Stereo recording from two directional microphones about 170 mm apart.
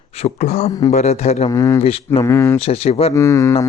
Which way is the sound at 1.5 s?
20° left (ahead or behind).